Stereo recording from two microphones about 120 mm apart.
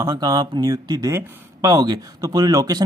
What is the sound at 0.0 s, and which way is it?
Speech, 35° right (ahead or behind).